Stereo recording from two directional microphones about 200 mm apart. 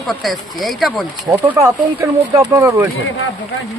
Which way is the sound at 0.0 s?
Centre (ahead or behind).